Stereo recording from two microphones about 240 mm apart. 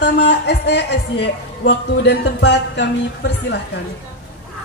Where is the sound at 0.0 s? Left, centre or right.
Left.